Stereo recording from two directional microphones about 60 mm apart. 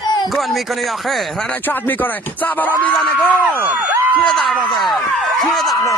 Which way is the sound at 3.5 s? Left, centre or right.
Right.